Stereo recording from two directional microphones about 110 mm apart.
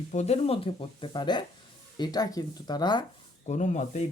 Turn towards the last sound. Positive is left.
turn(degrees=90)